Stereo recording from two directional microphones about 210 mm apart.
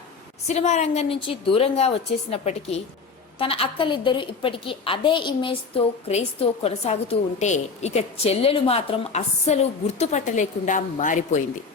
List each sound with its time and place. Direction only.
0.4 s a woman's voice: 35° left (ahead or behind)